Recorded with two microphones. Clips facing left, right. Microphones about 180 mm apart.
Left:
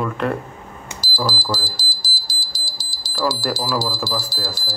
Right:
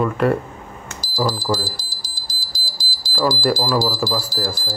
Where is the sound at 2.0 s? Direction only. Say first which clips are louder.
Left 2 dB; 30° left (ahead or behind).